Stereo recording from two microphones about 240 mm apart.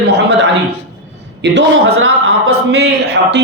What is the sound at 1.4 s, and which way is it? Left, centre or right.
Speech, right.